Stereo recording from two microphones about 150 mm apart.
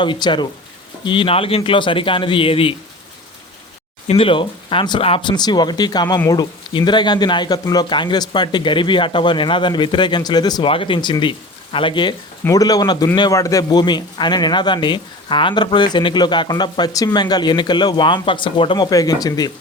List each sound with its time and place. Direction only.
0.0 s speech: 30° left (ahead or behind)
4.0 s a man's voice: 40° left (ahead or behind)
18.9 s a man's voice: 25° left (ahead or behind)